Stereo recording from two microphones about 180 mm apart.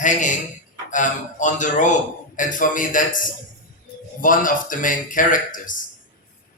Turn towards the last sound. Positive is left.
turn(degrees=45)  # may be behind; listen again after turning